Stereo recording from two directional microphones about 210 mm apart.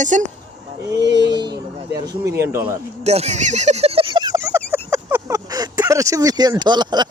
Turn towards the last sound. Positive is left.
turn(degrees=-20)  # may be behind; listen again after turning